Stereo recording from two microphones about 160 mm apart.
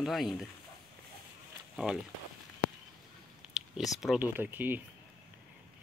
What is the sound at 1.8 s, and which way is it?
Speech, 5° right (ahead or behind).